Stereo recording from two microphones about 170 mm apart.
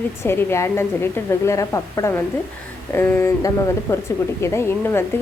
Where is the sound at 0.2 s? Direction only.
15° left (ahead or behind).